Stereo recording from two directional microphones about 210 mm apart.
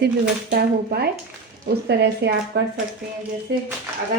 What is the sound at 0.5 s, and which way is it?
A woman's voice, 45° right (ahead or behind).